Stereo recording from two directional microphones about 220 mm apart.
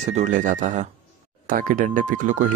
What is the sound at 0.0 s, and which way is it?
Speech, 30° right (ahead or behind).